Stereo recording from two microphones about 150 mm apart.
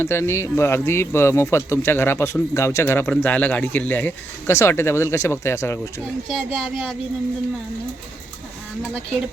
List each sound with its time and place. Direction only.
0.0 s speech: 15° left (ahead or behind)
6.2 s speech: centre (ahead or behind)